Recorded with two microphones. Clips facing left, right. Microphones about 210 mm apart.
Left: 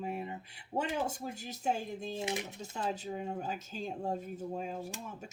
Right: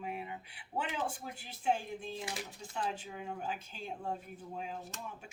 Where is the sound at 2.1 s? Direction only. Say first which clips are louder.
Left 5 dB; 20° left (ahead or behind).